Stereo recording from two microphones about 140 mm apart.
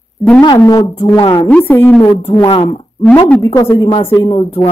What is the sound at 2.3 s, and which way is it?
Speech, 35° left (ahead or behind).